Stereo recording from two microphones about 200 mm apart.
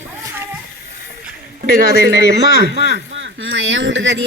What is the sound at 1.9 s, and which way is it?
Speech, 55° right (ahead or behind).